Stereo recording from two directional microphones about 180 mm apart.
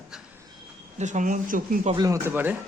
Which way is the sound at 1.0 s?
45° right (ahead or behind).